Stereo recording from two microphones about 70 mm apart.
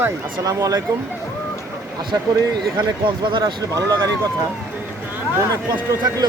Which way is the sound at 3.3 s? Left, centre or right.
Right.